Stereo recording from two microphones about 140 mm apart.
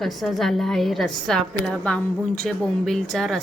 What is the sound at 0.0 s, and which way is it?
A woman's voice, centre (ahead or behind).